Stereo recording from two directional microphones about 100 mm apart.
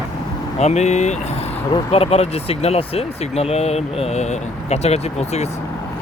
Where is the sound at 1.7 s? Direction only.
75° left (ahead or behind); by 5.5 s 90° left.